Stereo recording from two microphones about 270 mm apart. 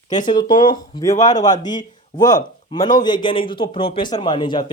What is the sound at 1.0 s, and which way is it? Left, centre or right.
A man's voice, centre.